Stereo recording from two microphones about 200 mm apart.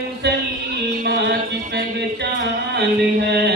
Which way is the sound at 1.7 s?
60° right (ahead or behind).